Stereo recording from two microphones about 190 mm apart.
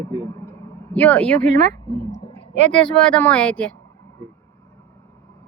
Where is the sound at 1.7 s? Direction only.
25° left (ahead or behind).